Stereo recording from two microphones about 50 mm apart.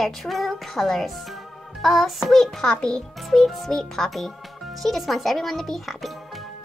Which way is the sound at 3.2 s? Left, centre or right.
Centre.